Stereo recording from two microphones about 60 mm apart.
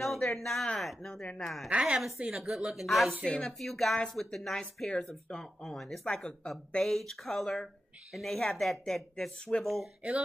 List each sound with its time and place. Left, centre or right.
0.0 s a sound: centre
0.4 s speech: centre
3.3 s speech: centre
9.5 s speech: centre